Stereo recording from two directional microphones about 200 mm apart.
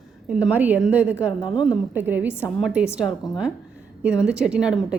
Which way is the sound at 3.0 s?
20° left (ahead or behind).